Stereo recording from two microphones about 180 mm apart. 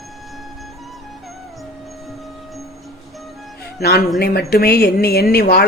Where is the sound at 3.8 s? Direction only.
60° left (ahead or behind).